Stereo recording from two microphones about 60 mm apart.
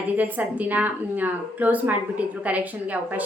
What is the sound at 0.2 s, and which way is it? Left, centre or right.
A woman's voice, right.